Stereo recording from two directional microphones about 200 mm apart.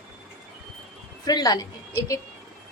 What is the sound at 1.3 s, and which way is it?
Speech, 20° left (ahead or behind).